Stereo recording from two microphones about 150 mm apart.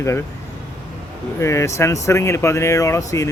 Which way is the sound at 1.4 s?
20° left (ahead or behind).